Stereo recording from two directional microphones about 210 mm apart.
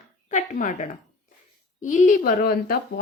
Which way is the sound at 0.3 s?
35° left (ahead or behind).